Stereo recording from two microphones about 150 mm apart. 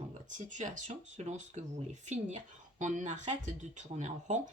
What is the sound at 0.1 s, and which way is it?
Speech, 55° right (ahead or behind).